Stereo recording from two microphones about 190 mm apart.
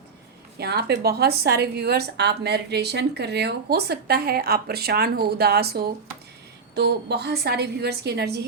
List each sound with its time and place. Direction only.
0.6 s a woman's voice: 55° right (ahead or behind)